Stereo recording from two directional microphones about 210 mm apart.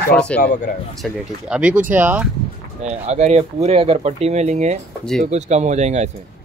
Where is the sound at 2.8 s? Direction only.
30° right (ahead or behind).